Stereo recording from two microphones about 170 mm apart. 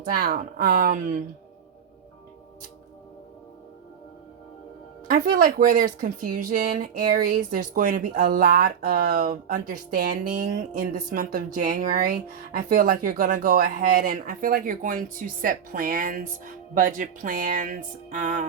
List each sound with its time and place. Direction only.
0.1 s speech: 60° right (ahead or behind)
5.0 s speech: 55° right (ahead or behind)